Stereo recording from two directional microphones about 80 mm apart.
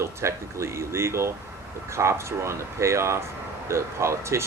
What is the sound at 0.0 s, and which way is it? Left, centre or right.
Speech, right.